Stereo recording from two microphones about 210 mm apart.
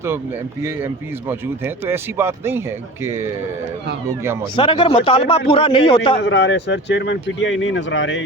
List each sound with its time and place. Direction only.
1.3 s a man's voice: 10° right (ahead or behind)
4.5 s speech: 25° left (ahead or behind)
6.2 s speech: 55° left (ahead or behind)